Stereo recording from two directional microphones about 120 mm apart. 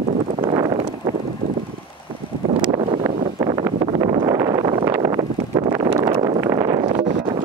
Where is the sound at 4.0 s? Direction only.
45° right (ahead or behind).